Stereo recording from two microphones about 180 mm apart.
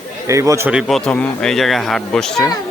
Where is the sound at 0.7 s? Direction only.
Centre (ahead or behind).